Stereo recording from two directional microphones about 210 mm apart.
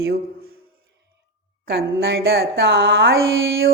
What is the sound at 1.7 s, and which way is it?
A woman's voice, 50° right (ahead or behind).